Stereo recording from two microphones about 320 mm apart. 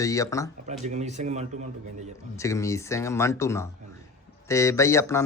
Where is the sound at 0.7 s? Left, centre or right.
Right.